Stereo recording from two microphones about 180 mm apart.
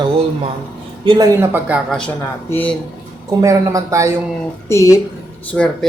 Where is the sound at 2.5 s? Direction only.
10° left (ahead or behind).